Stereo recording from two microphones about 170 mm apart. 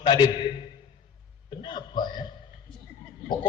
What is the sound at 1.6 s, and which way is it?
Speech, 25° left (ahead or behind).